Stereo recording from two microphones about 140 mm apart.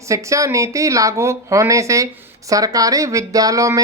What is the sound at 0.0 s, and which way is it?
Speech, 20° right (ahead or behind).